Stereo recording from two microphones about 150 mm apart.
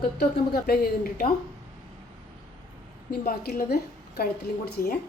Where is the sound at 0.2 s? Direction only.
90° left.